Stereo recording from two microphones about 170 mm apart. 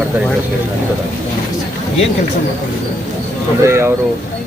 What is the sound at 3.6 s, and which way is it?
Speech, 15° right (ahead or behind).